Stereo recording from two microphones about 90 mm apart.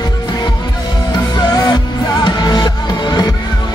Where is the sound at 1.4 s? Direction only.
45° left (ahead or behind).